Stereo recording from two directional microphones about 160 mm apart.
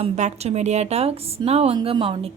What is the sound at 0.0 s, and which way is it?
A woman's voice, 45° right (ahead or behind).